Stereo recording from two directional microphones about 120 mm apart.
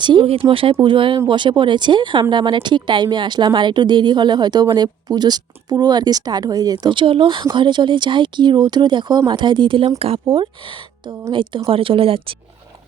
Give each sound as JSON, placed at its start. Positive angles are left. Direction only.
{"t": 0.0, "sound": "a woman's voice", "side_deg": -45}